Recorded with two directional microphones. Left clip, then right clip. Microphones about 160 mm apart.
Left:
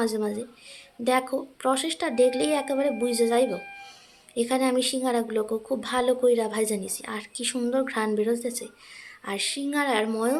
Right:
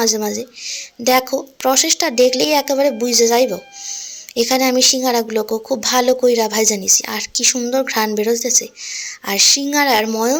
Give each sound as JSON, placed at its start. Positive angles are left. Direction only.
{"t": 0.0, "sound": "speech", "side_deg": -20}